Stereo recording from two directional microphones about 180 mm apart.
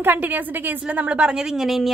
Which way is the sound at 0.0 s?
10° right (ahead or behind).